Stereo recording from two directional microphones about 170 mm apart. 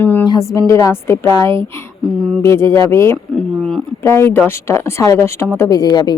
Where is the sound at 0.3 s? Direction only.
20° left (ahead or behind).